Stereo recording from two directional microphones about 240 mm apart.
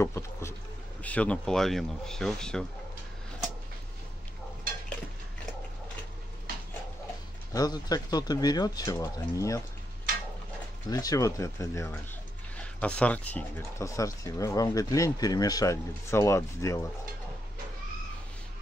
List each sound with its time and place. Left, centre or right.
0.0 s speech: centre
7.5 s speech: centre
10.9 s speech: centre